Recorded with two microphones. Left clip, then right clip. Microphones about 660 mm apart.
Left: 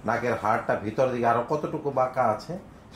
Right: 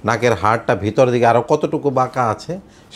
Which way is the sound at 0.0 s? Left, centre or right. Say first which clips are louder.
Right 10 dB; right.